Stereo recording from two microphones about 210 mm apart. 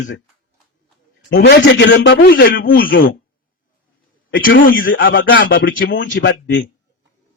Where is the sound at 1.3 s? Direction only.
55° left (ahead or behind).